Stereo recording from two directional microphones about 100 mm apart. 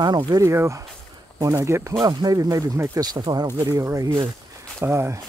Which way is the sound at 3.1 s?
50° right (ahead or behind).